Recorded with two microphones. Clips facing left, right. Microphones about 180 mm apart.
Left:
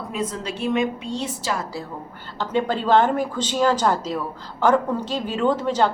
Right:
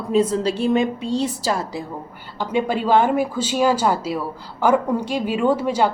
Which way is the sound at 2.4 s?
10° right (ahead or behind).